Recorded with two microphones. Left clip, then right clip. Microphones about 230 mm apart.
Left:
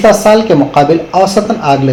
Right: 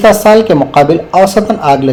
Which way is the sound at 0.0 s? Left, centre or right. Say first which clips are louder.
Right 1 dB; right.